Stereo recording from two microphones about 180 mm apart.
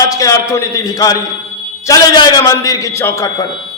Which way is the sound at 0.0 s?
20° left (ahead or behind).